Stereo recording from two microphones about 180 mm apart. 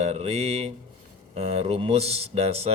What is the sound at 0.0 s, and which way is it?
Speech, 35° right (ahead or behind).